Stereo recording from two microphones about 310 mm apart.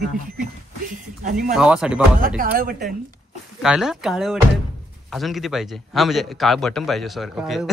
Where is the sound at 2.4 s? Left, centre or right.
Right.